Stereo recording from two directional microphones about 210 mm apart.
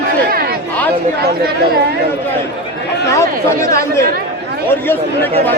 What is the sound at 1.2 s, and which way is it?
Speech, 50° right (ahead or behind).